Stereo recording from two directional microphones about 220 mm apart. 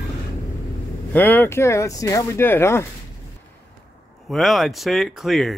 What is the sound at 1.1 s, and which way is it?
Speech, 10° left (ahead or behind).